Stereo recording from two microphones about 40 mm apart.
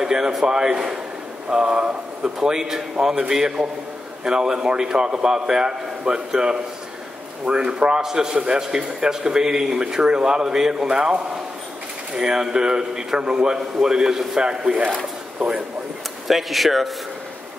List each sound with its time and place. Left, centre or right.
0.0 s a man's voice: centre
16.3 s speech: centre